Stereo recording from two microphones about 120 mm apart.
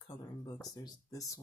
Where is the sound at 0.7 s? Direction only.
30° left (ahead or behind).